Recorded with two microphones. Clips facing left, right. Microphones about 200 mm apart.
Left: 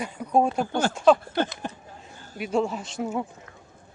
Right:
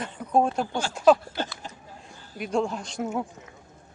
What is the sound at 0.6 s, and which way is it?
Speech, 55° left (ahead or behind).